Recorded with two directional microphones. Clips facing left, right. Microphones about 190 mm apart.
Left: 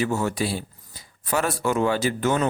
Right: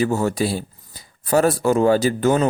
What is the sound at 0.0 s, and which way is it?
Speech, 40° right (ahead or behind).